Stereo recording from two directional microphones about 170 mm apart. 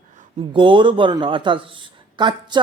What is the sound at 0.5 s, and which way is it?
Speech, 30° right (ahead or behind).